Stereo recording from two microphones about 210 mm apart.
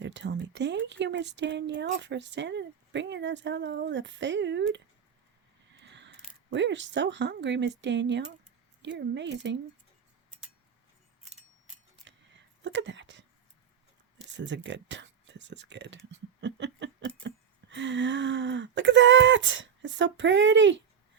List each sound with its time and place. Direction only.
0.0 s speech: 55° right (ahead or behind)
5.8 s speech: 55° right (ahead or behind)
12.0 s a sound: 60° right (ahead or behind)
14.3 s speech: 60° right (ahead or behind)
16.1 s a sound: 55° right (ahead or behind)
17.2 s speech: 60° right (ahead or behind)